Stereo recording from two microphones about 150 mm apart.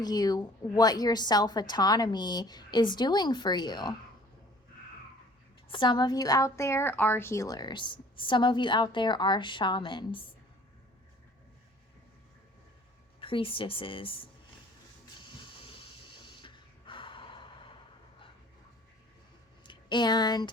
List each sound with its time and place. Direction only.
0.0 s a woman's voice: 25° left (ahead or behind)
5.6 s a woman's voice: 35° left (ahead or behind)
13.1 s a woman's voice: 35° left (ahead or behind)
15.4 s snort: 35° left (ahead or behind)
19.6 s speech: 30° left (ahead or behind)